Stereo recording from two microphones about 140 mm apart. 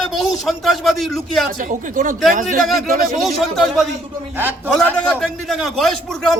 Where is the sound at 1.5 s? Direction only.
70° right (ahead or behind).